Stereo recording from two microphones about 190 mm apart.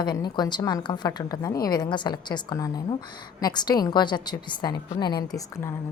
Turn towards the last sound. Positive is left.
turn(degrees=15)  # may be behind; listen again after turning